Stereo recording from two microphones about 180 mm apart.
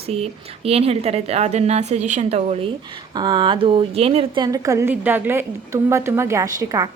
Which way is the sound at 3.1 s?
25° right (ahead or behind).